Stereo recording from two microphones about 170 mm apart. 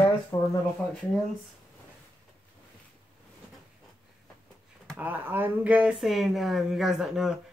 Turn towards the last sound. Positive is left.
turn(degrees=-5)  # may be behind; listen again after turning